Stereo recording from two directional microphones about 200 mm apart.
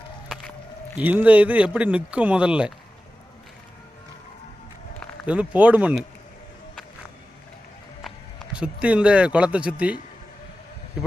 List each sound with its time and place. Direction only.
0.9 s speech: 10° right (ahead or behind)
5.2 s speech: 5° right (ahead or behind)
8.0 s speech: centre (ahead or behind)